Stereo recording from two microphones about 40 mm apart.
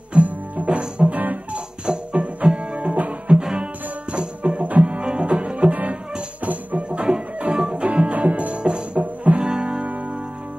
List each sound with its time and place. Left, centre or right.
0.1 s music: right
1.0 s music: right
1.9 s music: right
2.9 s music: right
3.3 s music: centre
4.6 s music: right
7.5 s music: centre
7.8 s music: right
8.6 s music: right
9.0 s music: right
9.4 s music: centre